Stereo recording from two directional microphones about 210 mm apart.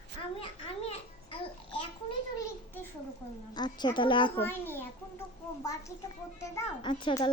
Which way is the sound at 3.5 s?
20° left (ahead or behind).